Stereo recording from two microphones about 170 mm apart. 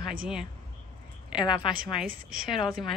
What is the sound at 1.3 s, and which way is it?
Speech, 25° left (ahead or behind).